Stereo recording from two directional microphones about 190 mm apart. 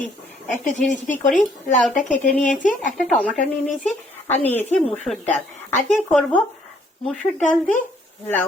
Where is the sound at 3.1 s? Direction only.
5° left (ahead or behind).